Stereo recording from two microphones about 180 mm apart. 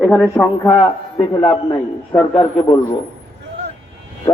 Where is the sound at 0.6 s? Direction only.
25° left (ahead or behind).